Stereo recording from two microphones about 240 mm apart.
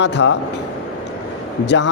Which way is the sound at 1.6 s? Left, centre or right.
Left.